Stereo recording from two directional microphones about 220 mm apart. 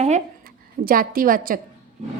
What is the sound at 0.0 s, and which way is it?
A woman's voice, 35° right (ahead or behind).